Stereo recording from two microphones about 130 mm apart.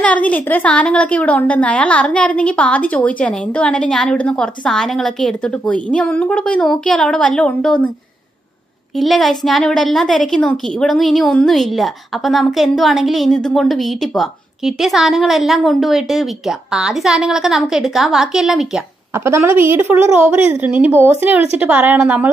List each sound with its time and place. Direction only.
0.0 s a woman's voice: 10° left (ahead or behind)
8.9 s a woman's voice: centre (ahead or behind)
19.1 s a woman's voice: 20° right (ahead or behind)